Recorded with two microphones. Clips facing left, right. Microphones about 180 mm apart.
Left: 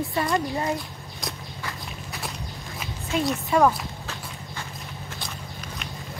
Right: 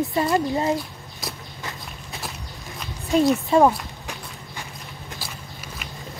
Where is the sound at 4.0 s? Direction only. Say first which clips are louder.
Even; 15° right (ahead or behind).